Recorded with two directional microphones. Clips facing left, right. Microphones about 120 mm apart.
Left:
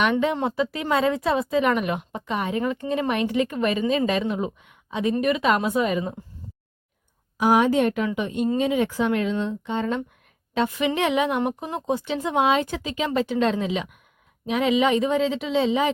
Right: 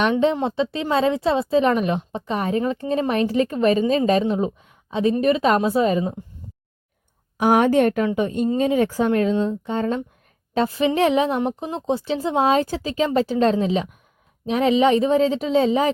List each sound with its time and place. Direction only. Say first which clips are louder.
0.0 s speech: right 3 dB; 30° right (ahead or behind)
7.3 s a woman's voice: right 3 dB; 55° right (ahead or behind)
8.0 s speech: right 3 dB; 40° right (ahead or behind)